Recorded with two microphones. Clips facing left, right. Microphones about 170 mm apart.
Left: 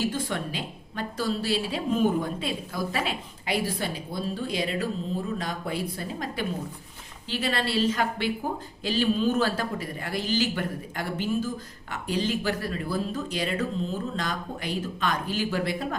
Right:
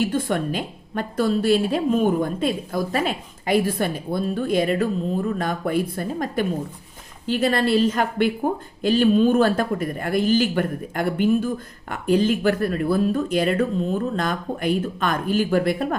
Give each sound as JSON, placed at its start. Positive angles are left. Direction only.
{"t": 0.0, "sound": "a woman's voice", "side_deg": -55}